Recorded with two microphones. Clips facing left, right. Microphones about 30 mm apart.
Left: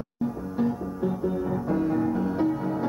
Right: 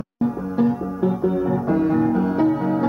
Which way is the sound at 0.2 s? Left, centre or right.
Right.